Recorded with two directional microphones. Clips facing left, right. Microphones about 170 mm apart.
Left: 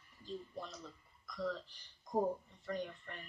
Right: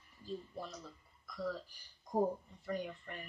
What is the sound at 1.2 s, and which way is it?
Speech, 10° right (ahead or behind).